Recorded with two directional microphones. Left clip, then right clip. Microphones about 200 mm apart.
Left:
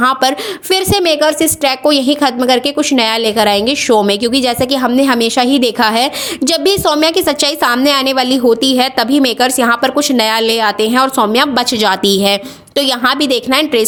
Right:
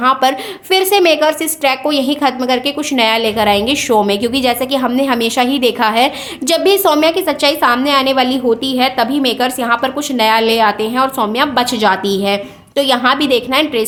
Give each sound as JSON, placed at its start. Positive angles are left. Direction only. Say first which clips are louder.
{"t": 0.0, "sound": "a woman's voice", "louder": "even", "side_deg": 30}